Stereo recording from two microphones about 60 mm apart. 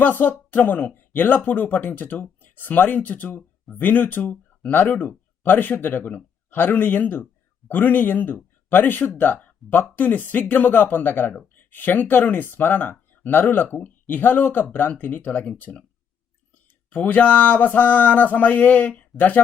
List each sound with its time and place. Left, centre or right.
0.0 s speech: left
16.9 s speech: left